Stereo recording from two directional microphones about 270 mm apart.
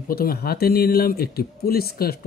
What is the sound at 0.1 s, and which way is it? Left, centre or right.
Speech, left.